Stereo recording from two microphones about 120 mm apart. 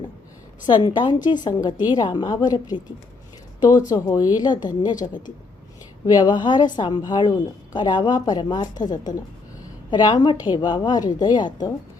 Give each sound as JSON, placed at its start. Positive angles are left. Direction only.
{"t": 0.7, "sound": "a woman's voice", "side_deg": 40}
{"t": 4.9, "sound": "a woman's voice", "side_deg": 90}
{"t": 6.1, "sound": "a woman's voice", "side_deg": 35}
{"t": 9.9, "sound": "a woman's voice", "side_deg": 35}